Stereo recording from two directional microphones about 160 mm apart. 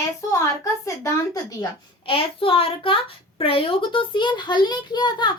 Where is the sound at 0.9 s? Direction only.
20° left (ahead or behind).